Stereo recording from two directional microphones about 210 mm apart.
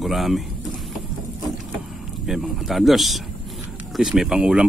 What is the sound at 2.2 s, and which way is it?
Speech, centre (ahead or behind).